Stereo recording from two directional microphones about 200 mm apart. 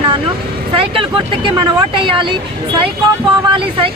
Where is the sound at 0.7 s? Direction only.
25° right (ahead or behind).